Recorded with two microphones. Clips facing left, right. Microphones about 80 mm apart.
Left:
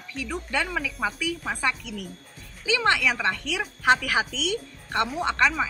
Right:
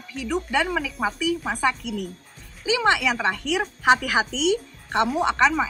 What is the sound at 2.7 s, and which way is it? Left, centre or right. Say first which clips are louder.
Speech: right 2 dB; centre.